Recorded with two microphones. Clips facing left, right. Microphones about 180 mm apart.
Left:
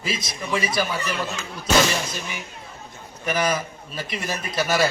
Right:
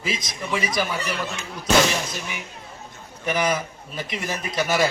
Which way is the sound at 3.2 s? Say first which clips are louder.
Even; 15° right (ahead or behind).